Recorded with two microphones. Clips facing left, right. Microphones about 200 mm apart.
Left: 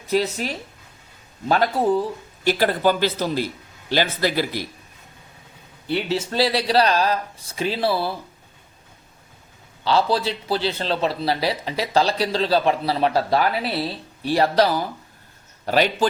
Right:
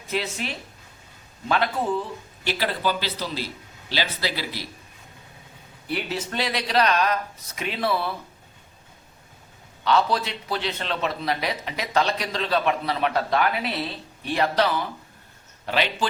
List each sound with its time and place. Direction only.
0.1 s a man's voice: 40° left (ahead or behind)
5.9 s a man's voice: 30° left (ahead or behind)
9.8 s a man's voice: 30° left (ahead or behind)